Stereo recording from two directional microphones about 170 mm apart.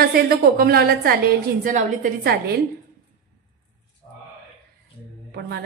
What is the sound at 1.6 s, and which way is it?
Speech, 50° right (ahead or behind).